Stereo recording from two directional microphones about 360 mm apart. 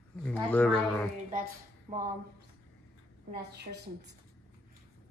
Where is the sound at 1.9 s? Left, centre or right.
Right.